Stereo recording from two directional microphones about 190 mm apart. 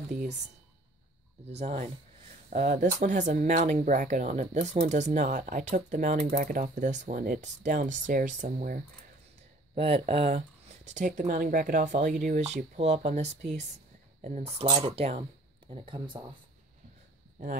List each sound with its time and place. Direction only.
1.5 s speech: 35° right (ahead or behind)
9.8 s speech: 30° right (ahead or behind)